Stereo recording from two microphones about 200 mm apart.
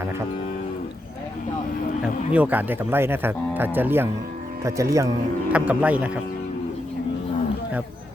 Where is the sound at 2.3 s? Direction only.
10° right (ahead or behind).